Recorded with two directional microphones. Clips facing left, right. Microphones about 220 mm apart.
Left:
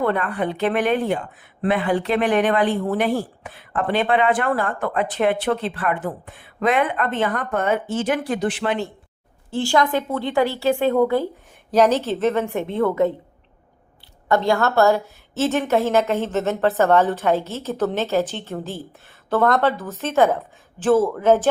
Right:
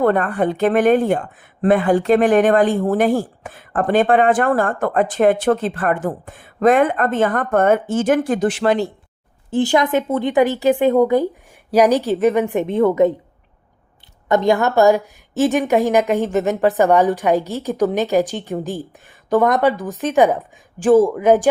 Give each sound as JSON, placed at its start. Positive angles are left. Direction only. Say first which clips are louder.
{"t": 0.0, "sound": "speech", "louder": "right 5 dB", "side_deg": -45}
{"t": 9.5, "sound": "a woman's voice", "louder": "right 3 dB", "side_deg": -20}
{"t": 14.3, "sound": "a woman's voice", "louder": "right 3 dB", "side_deg": -20}